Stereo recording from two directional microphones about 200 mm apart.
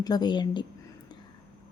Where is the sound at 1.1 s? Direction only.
20° left (ahead or behind).